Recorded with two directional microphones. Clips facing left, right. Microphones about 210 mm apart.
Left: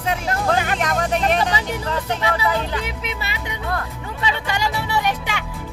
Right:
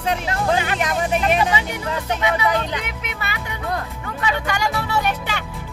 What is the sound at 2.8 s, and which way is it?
Speech, 30° left (ahead or behind).